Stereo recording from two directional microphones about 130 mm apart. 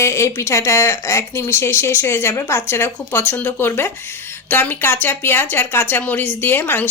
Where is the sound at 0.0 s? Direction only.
20° left (ahead or behind).